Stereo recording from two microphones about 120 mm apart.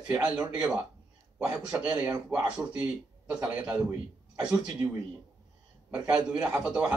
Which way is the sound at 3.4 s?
15° right (ahead or behind).